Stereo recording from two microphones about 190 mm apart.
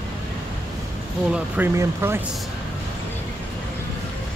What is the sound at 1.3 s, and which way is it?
Speech, 10° right (ahead or behind).